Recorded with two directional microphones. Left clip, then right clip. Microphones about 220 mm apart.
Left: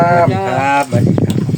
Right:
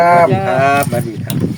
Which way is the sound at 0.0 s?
40° right (ahead or behind).